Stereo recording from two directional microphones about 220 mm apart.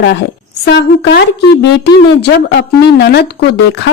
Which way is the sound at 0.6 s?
50° left (ahead or behind).